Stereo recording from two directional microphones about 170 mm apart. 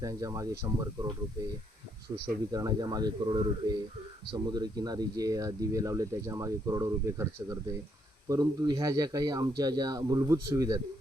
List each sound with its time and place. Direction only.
0.0 s speech: 20° right (ahead or behind)
2.5 s speech: 20° right (ahead or behind)